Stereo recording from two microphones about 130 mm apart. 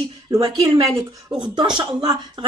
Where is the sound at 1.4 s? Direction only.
35° right (ahead or behind).